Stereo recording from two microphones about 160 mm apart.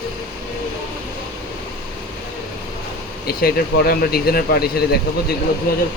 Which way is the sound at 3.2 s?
75° left (ahead or behind).